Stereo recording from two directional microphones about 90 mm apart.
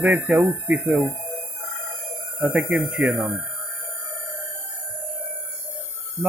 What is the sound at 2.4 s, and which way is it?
Speech, 20° right (ahead or behind).